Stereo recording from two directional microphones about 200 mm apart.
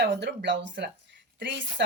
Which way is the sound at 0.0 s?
60° right (ahead or behind).